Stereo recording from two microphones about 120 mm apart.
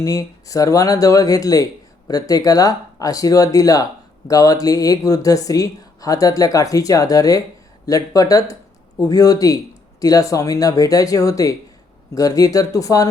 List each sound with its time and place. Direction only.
0.0 s speech: 30° left (ahead or behind)